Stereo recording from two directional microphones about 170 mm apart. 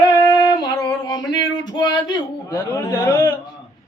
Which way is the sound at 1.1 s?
25° left (ahead or behind).